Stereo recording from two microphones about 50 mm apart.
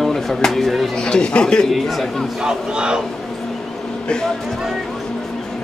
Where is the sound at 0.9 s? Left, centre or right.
Centre.